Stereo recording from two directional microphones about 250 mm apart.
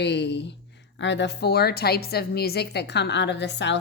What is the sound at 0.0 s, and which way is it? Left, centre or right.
Speech, left.